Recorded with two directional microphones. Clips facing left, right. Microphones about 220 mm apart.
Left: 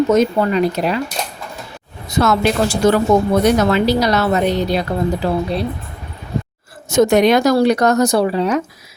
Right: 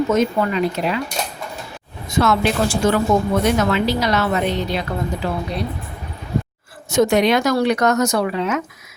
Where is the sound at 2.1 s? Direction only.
40° left (ahead or behind).